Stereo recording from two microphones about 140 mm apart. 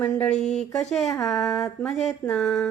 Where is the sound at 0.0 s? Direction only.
10° left (ahead or behind).